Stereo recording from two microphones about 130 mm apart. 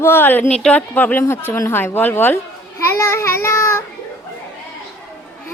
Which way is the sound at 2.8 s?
25° left (ahead or behind).